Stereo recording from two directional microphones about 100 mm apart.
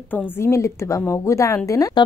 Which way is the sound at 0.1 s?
25° left (ahead or behind).